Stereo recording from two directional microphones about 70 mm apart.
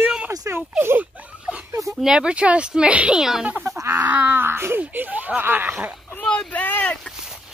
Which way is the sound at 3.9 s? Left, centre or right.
Right.